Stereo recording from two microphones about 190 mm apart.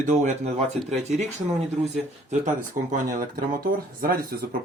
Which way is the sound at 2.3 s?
40° right (ahead or behind).